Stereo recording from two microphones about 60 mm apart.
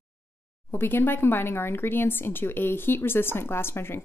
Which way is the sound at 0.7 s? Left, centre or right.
Left.